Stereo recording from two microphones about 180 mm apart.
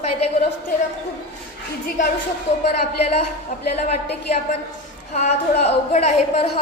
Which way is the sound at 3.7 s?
35° left (ahead or behind).